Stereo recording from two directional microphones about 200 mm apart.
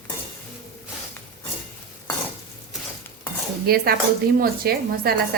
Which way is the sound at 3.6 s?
50° right (ahead or behind).